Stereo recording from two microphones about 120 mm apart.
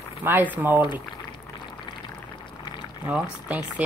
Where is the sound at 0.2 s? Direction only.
15° right (ahead or behind).